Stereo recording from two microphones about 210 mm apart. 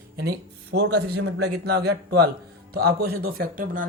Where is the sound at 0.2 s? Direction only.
50° right (ahead or behind).